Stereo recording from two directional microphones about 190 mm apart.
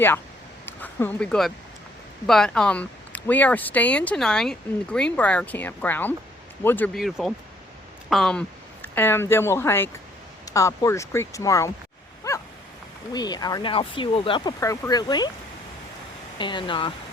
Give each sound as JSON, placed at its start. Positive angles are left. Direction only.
{"t": 0.6, "sound": "a sound", "side_deg": 10}
{"t": 2.2, "sound": "speech", "side_deg": 5}
{"t": 12.3, "sound": "dog", "side_deg": 20}
{"t": 13.1, "sound": "speech", "side_deg": 20}
{"t": 16.4, "sound": "speech", "side_deg": 25}